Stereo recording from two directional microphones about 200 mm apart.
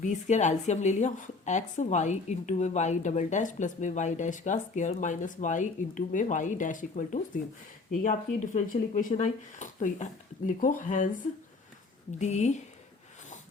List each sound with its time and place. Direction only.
0.0 s a woman's voice: 40° left (ahead or behind)
12.2 s a woman's voice: 35° left (ahead or behind)